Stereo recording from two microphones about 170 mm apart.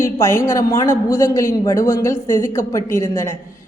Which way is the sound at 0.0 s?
15° left (ahead or behind).